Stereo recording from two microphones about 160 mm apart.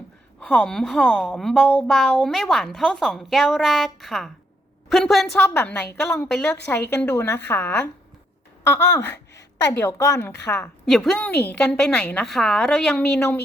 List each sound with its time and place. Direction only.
0.4 s a woman's voice: 5° left (ahead or behind)
10.8 s a woman's voice: centre (ahead or behind)